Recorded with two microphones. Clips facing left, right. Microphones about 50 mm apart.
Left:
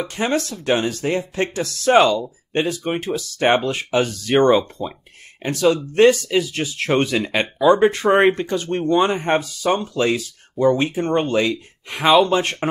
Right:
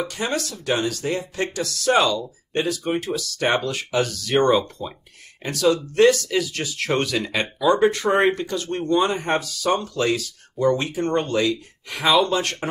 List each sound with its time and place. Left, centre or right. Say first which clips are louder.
0.0 s speech: left 4 dB; left
4.8 s speech: left 4 dB; centre
5.4 s speech: left 2 dB; left